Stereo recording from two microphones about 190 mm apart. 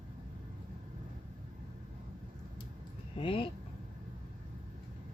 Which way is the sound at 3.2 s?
30° left (ahead or behind).